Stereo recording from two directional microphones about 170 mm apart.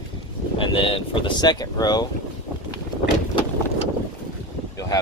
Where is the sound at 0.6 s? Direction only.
30° left (ahead or behind).